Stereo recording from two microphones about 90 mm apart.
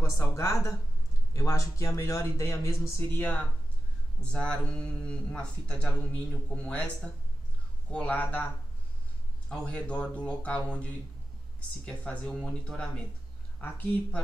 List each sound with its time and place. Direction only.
0.3 s a man's voice: 30° left (ahead or behind)
3.2 s speech: 15° left (ahead or behind)
9.5 s speech: 10° left (ahead or behind)
13.6 s speech: 20° left (ahead or behind)